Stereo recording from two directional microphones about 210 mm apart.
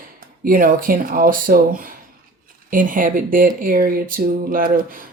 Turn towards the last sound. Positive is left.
turn(degrees=-40)  # may be behind; listen again after turning